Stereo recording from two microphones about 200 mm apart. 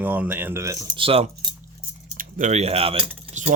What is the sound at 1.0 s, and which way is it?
Speech, 25° right (ahead or behind).